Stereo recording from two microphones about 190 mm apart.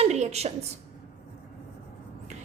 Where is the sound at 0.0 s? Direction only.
35° right (ahead or behind).